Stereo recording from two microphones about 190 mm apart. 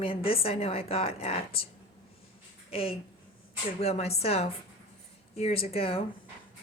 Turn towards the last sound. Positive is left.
turn(degrees=30)  # may be behind; listen again after turning